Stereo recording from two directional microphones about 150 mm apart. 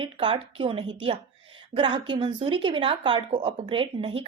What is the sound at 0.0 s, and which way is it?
Speech, 35° right (ahead or behind).